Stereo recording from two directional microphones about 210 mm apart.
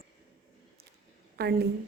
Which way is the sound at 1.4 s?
50° right (ahead or behind).